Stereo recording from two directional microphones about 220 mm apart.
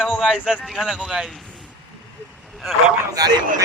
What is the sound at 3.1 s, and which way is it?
Speech, 20° right (ahead or behind).